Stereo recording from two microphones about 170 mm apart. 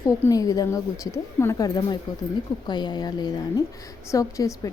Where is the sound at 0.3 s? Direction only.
20° left (ahead or behind).